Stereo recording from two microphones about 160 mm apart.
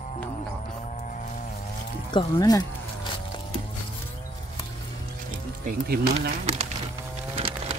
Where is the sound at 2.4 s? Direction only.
25° left (ahead or behind).